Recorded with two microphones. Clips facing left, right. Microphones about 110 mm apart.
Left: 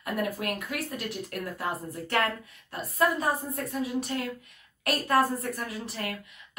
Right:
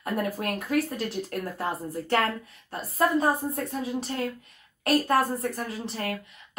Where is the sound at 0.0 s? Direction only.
35° right (ahead or behind).